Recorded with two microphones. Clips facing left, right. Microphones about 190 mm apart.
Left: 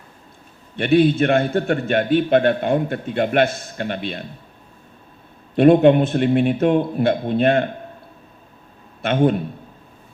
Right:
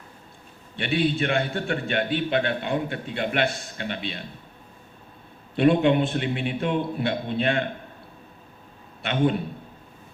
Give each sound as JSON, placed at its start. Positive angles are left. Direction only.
{"t": 0.8, "sound": "a man's voice", "side_deg": 45}
{"t": 5.5, "sound": "a man's voice", "side_deg": 45}
{"t": 9.0, "sound": "a man's voice", "side_deg": 45}